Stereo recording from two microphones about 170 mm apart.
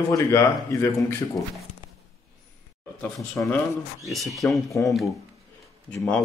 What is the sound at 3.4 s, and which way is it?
Speech, 10° left (ahead or behind).